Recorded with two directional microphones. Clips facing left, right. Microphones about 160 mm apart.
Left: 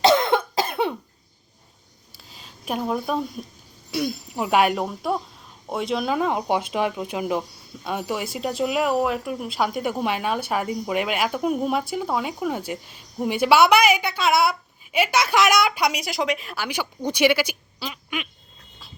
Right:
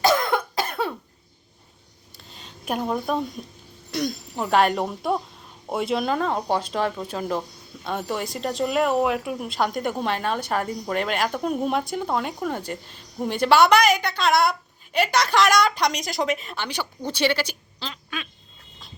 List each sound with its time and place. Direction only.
0.0 s cough: 25° left (ahead or behind)
2.1 s a sound: centre (ahead or behind)
3.9 s a woman's voice: 5° left (ahead or behind)